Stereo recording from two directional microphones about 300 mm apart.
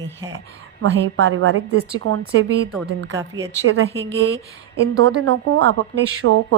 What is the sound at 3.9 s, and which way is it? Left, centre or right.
Speech, centre.